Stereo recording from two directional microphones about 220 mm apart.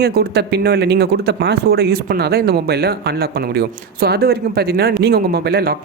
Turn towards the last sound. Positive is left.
turn(degrees=-45)  # may be behind; listen again after turning